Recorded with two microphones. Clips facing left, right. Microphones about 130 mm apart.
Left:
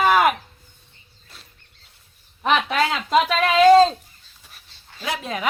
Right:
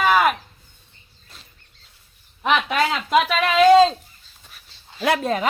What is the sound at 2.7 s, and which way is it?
Speech, 5° right (ahead or behind).